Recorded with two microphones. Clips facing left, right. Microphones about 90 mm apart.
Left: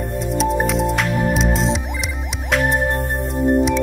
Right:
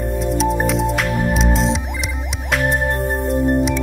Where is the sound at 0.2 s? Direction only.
Centre (ahead or behind).